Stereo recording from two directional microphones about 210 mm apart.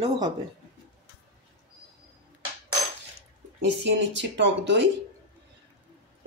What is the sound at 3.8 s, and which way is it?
Speech, 60° right (ahead or behind).